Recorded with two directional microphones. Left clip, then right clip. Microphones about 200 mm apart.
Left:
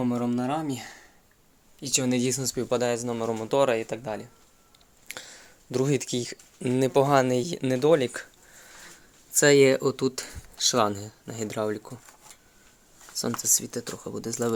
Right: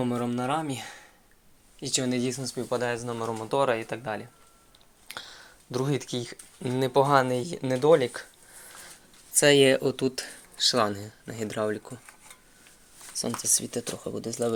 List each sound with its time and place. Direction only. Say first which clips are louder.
0.0 s speech: left 1 dB; 5° left (ahead or behind)
1.8 s speech: left 2 dB; 15° left (ahead or behind)
2.0 s speech: left 3 dB; 40° left (ahead or behind); by 11.9 s 10° left (ahead or behind)
13.4 s speech: left 1 dB; 15° left (ahead or behind)